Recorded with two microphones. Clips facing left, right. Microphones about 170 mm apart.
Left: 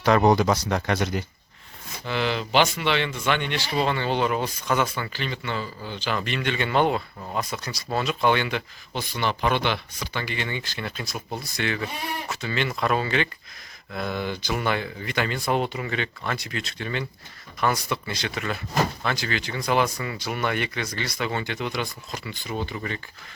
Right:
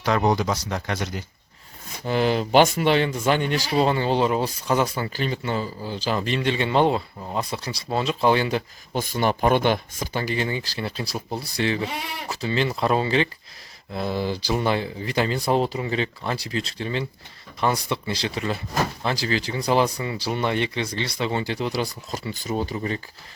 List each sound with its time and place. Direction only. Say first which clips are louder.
0.0 s speech: left 3 dB; 60° left (ahead or behind)
2.0 s speech: right 5 dB; 40° right (ahead or behind)